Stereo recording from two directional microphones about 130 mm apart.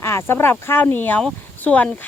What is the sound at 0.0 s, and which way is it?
Speech, 20° left (ahead or behind).